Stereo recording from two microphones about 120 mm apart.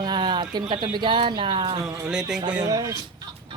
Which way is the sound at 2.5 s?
30° right (ahead or behind).